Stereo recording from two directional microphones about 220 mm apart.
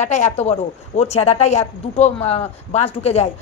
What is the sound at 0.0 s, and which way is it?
A woman's voice, 35° left (ahead or behind).